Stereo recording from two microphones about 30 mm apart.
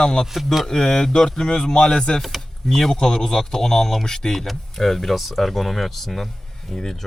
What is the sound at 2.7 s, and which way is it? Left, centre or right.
Speech, centre.